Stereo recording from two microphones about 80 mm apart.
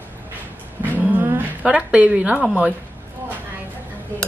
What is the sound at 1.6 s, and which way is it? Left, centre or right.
A woman's voice, centre.